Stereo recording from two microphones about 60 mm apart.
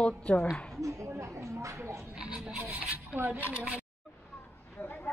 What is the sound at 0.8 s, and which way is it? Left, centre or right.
Speech, right.